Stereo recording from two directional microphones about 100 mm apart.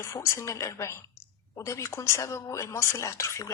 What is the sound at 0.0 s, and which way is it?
Speech, 30° left (ahead or behind).